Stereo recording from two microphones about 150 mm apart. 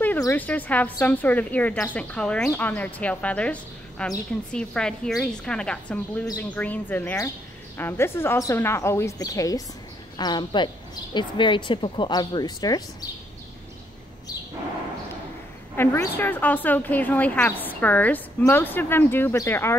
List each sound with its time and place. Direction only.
0.2 s a woman's voice: 15° left (ahead or behind)
15.7 s a woman's voice: 15° left (ahead or behind)